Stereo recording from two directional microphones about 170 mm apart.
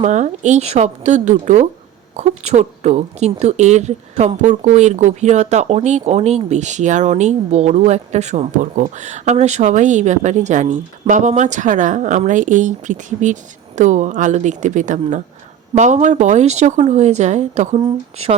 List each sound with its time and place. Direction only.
0.0 s speech: 45° right (ahead or behind)